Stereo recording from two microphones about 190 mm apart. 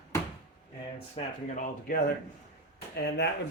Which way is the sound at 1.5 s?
45° left (ahead or behind).